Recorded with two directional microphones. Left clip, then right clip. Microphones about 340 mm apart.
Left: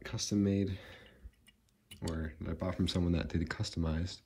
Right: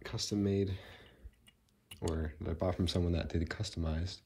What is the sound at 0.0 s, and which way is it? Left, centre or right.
Speech, centre.